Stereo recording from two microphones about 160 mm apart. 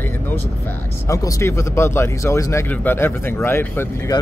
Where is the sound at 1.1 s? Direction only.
20° left (ahead or behind).